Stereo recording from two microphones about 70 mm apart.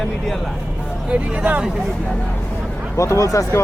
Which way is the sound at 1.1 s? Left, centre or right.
Centre.